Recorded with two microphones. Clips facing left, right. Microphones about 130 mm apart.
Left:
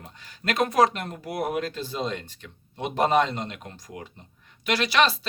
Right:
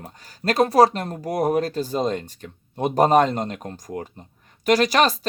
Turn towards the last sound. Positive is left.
turn(degrees=-45)  # may be behind; listen again after turning